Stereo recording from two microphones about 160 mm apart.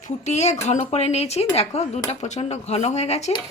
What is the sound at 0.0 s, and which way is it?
Speech, 45° left (ahead or behind).